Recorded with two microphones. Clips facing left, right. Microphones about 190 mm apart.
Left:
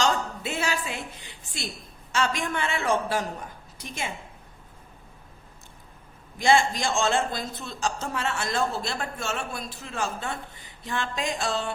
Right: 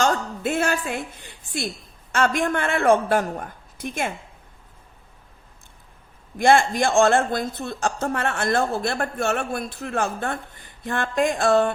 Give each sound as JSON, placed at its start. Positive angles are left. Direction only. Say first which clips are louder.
{"t": 0.0, "sound": "a woman's voice", "louder": "right 4 dB", "side_deg": -50}
{"t": 6.4, "sound": "a woman's voice", "louder": "right 4 dB", "side_deg": -55}